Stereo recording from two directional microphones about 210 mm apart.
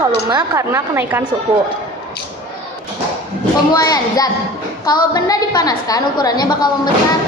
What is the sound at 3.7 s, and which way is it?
A woman's voice, 15° left (ahead or behind).